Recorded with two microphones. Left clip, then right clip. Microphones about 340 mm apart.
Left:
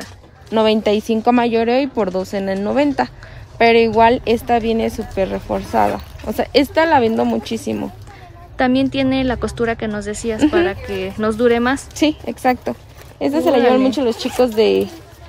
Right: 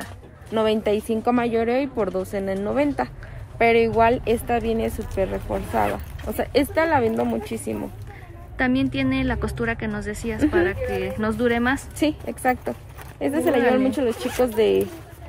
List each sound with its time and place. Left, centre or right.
0.5 s speech: left
8.5 s a woman's voice: centre
12.0 s speech: left
13.6 s a woman's voice: centre
14.4 s speech: left